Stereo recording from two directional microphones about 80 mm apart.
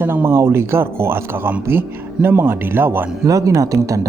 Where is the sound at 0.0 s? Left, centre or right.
Right.